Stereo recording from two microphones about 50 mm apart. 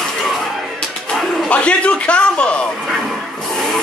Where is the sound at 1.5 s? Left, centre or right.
Left.